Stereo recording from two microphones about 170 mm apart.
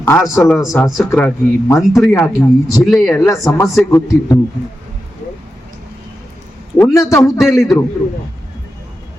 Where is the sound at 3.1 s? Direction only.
15° left (ahead or behind).